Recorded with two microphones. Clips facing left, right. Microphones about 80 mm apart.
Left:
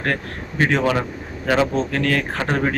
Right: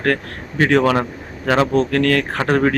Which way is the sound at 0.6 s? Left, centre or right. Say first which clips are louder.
Right 4 dB; right.